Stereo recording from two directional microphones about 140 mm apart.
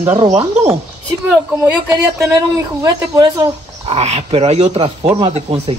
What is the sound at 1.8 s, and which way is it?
A man's voice, 20° right (ahead or behind).